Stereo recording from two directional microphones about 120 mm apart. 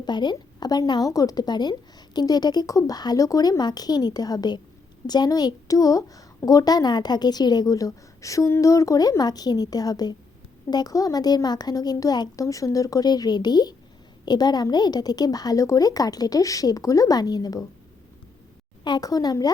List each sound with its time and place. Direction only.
0.0 s a woman's voice: 40° left (ahead or behind)
18.9 s a woman's voice: 30° left (ahead or behind)